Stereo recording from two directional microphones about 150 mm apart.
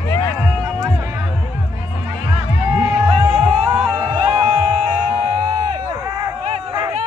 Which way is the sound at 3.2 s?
15° right (ahead or behind).